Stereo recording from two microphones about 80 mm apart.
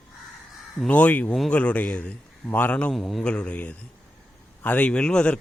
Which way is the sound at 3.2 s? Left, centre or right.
Centre.